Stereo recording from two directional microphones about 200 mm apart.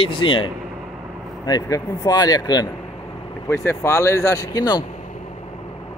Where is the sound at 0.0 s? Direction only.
25° left (ahead or behind).